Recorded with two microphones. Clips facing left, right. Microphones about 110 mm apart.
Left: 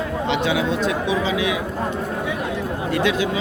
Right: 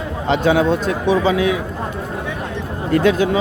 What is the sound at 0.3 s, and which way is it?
A man's voice, 45° right (ahead or behind).